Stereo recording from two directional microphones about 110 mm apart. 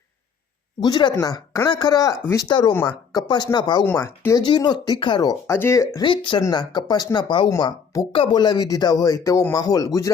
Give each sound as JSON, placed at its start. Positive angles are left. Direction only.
{"t": 0.8, "sound": "speech", "side_deg": 40}
{"t": 5.5, "sound": "speech", "side_deg": 25}
{"t": 6.0, "sound": "speech", "side_deg": 45}